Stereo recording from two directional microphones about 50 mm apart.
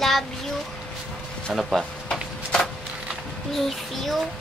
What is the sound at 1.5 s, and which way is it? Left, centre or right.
Speech, centre.